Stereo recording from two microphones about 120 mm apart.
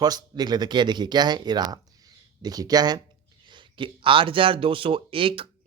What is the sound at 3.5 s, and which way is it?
Speech, 45° right (ahead or behind).